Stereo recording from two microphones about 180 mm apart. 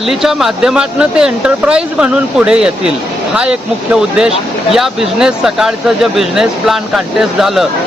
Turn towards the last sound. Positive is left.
turn(degrees=0)  # may be behind; listen again after turning